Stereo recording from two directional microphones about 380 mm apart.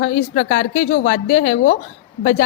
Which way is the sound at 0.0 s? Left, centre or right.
Left.